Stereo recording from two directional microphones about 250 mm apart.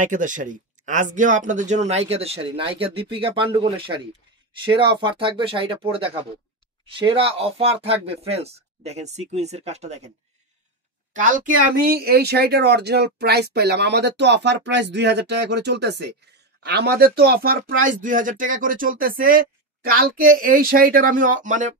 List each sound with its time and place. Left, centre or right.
0.0 s speech: right
11.1 s speech: right